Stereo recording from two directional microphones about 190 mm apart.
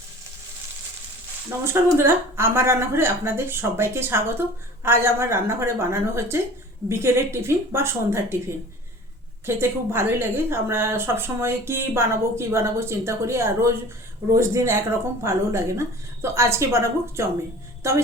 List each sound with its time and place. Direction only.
1.6 s a woman's voice: 15° right (ahead or behind)
9.5 s a woman's voice: 10° right (ahead or behind)